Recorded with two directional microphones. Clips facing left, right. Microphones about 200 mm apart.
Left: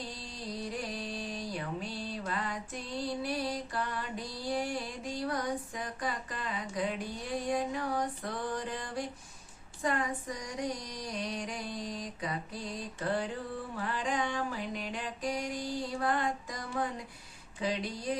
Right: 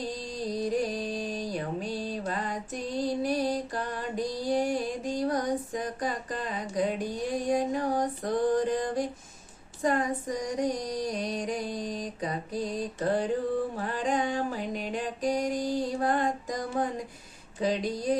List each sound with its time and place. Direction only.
0.4 s music: 45° right (ahead or behind)
9.8 s female singing: 40° right (ahead or behind)
13.7 s a sound: 40° right (ahead or behind)